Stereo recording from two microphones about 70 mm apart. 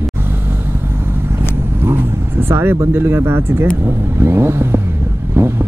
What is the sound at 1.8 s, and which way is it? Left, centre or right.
Vehicle, right.